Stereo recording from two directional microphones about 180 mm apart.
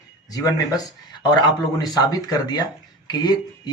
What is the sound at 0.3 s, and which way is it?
Speech, 20° left (ahead or behind).